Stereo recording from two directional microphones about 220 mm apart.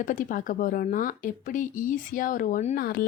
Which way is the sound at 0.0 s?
35° left (ahead or behind).